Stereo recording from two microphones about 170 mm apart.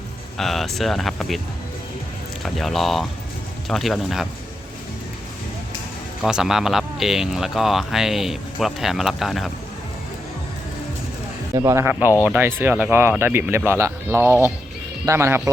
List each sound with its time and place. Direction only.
0.3 s speech: centre (ahead or behind)
2.4 s speech: centre (ahead or behind)
6.2 s speech: 5° right (ahead or behind)
11.5 s speech: 15° right (ahead or behind)